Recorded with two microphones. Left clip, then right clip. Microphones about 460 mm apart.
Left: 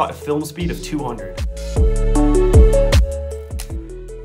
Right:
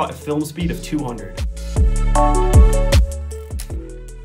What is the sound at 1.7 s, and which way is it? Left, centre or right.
Music, centre.